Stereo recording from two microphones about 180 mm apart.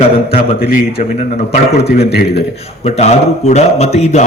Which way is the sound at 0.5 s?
60° left (ahead or behind).